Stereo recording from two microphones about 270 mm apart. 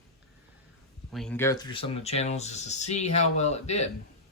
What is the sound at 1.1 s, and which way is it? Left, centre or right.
Speech, centre.